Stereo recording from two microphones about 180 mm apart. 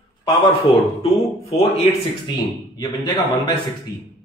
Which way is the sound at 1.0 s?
35° left (ahead or behind).